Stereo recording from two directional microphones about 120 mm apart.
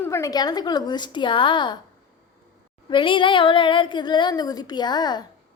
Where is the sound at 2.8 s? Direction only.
45° left (ahead or behind).